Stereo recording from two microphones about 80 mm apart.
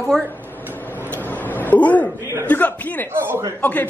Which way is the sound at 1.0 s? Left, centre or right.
Left.